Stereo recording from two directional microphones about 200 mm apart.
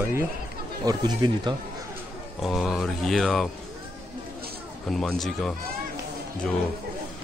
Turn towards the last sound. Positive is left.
turn(degrees=0)  # may be behind; listen again after turning